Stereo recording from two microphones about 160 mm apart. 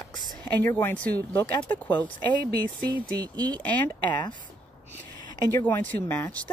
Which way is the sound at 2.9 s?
25° right (ahead or behind).